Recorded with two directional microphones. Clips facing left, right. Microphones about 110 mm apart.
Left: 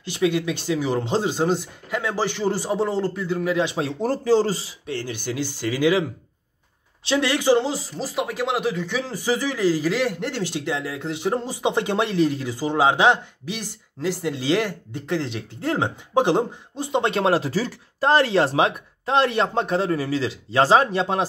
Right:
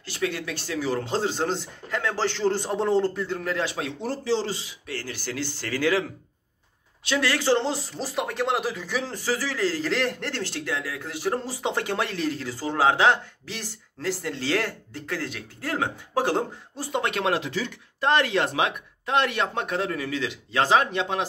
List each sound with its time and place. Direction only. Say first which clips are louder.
0.0 s speech: left 7 dB; 15° left (ahead or behind)
4.0 s speech: left 7 dB; 45° left (ahead or behind)
4.8 s speech: left 5 dB; 20° left (ahead or behind)
7.1 s speech: left 4 dB; 20° left (ahead or behind)
7.6 s speech: left 2 dB; 5° left (ahead or behind)
9.1 s speech: left 4 dB; 15° left (ahead or behind); by 21.3 s 35° left (ahead or behind)